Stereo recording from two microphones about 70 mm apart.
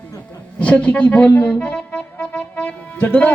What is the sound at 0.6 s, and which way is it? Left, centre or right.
Speech, left.